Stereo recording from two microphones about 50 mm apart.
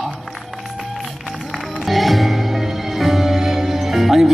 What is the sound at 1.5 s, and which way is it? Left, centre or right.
Music, centre.